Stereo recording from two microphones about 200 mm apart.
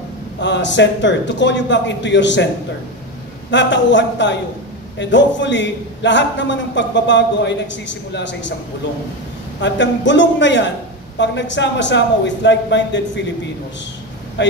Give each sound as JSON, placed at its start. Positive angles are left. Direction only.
{"t": 0.4, "sound": "a man's voice", "side_deg": 65}
{"t": 3.4, "sound": "a man's voice", "side_deg": 65}
{"t": 9.6, "sound": "a man's voice", "side_deg": 65}
{"t": 14.4, "sound": "a man's voice", "side_deg": 60}